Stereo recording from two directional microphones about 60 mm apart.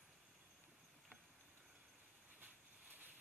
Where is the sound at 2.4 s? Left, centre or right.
Right.